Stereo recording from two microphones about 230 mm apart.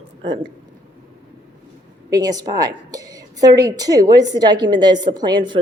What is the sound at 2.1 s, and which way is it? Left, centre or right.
A woman's voice, centre.